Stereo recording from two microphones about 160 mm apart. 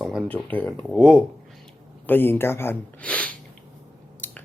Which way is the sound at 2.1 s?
15° left (ahead or behind).